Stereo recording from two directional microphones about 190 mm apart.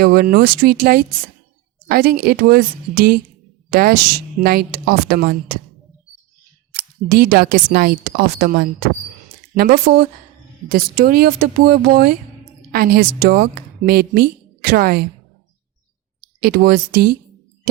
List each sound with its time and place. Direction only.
0.0 s a woman's voice: 50° right (ahead or behind)
7.1 s a woman's voice: 50° right (ahead or behind)
16.4 s a woman's voice: 50° right (ahead or behind)